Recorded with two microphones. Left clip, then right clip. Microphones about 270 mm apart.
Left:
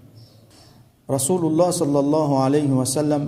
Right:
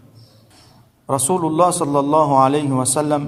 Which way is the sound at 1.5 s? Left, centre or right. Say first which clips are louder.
Right 3 dB; centre.